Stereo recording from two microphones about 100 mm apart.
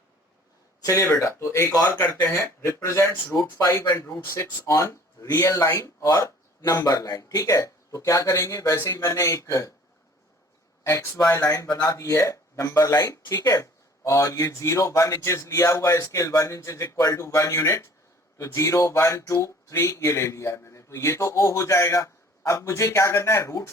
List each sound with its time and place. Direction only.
0.8 s speech: 30° left (ahead or behind)
9.0 s speech: 25° left (ahead or behind)
10.8 s speech: 30° left (ahead or behind)